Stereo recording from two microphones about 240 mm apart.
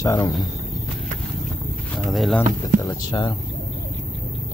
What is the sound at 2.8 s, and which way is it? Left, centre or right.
Speech, centre.